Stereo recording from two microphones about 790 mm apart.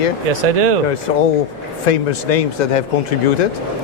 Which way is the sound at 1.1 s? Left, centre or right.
Left.